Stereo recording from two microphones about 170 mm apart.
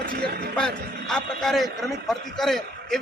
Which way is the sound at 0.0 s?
60° right (ahead or behind).